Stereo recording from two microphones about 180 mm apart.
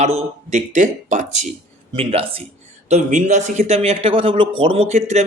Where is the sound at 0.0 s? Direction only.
35° right (ahead or behind).